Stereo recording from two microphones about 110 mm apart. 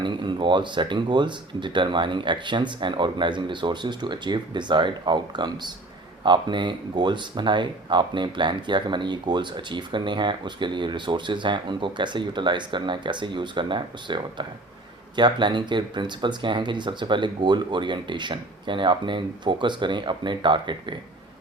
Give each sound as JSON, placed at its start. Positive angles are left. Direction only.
{"t": 0.0, "sound": "speech", "side_deg": -45}